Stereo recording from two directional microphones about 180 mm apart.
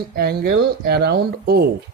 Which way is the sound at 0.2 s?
60° right (ahead or behind).